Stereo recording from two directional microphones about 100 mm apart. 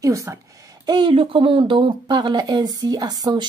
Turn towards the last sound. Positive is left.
turn(degrees=-45)  # may be behind; listen again after turning